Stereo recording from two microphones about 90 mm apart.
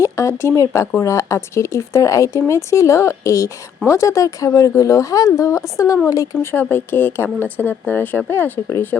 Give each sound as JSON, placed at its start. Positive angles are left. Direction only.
{"t": 0.0, "sound": "speech", "side_deg": 35}
{"t": 6.4, "sound": "speech", "side_deg": 25}